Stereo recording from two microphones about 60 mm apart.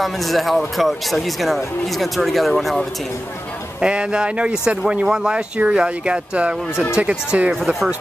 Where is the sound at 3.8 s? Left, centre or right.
Centre.